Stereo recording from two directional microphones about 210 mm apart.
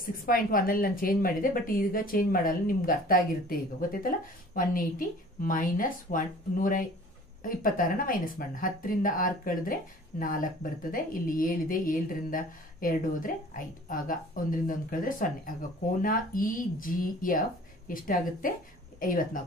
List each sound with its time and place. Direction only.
0.0 s speech: 40° left (ahead or behind)